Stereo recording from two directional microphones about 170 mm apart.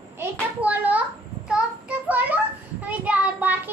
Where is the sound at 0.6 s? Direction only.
10° right (ahead or behind).